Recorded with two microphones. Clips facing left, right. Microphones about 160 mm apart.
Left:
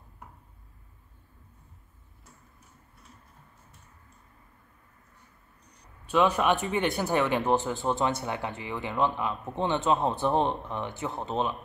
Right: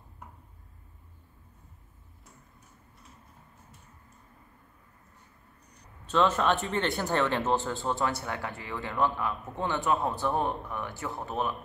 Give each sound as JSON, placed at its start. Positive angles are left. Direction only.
{"t": 6.0, "sound": "speech", "side_deg": 15}